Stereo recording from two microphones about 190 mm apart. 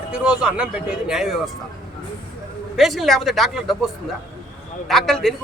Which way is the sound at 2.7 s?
Centre (ahead or behind).